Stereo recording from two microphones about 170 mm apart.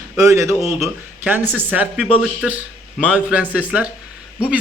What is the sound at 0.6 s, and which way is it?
Speech, centre (ahead or behind).